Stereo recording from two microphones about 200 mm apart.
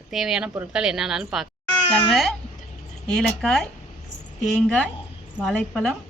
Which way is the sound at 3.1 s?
Centre (ahead or behind).